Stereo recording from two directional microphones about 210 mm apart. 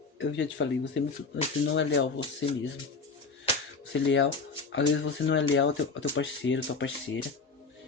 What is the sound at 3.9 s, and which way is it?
Speech, 60° left (ahead or behind).